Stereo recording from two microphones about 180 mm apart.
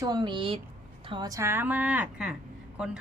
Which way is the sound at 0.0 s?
20° right (ahead or behind).